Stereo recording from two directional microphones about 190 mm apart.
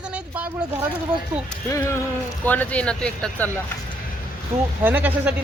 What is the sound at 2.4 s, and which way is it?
Speech, 10° left (ahead or behind).